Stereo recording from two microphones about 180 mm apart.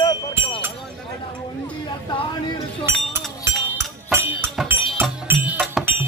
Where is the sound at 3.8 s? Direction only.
15° right (ahead or behind).